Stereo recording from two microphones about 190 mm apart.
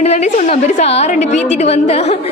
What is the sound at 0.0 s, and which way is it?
A woman's voice, 35° left (ahead or behind).